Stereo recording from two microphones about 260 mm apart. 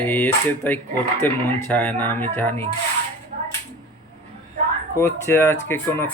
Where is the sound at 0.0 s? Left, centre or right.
Centre.